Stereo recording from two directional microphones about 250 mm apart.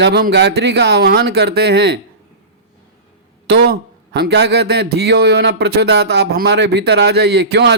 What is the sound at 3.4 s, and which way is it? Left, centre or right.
Speech, right.